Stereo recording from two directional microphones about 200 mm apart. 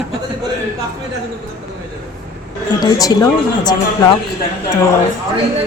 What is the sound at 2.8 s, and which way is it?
Speech, 20° left (ahead or behind).